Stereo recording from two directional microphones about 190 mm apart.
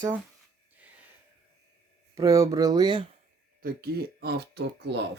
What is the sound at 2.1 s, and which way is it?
Speech, 15° right (ahead or behind).